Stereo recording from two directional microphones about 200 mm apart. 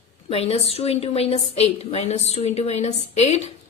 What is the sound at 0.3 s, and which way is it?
A woman's voice, 30° left (ahead or behind).